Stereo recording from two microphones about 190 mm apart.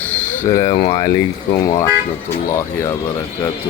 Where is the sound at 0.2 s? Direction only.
20° left (ahead or behind).